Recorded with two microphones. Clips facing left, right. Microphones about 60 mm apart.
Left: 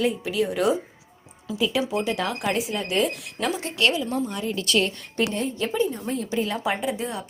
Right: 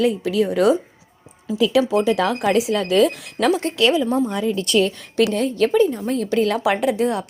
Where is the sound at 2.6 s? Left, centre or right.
Right.